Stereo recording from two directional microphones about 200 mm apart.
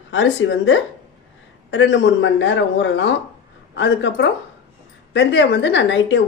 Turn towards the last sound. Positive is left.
turn(degrees=65)  # may be behind; listen again after turning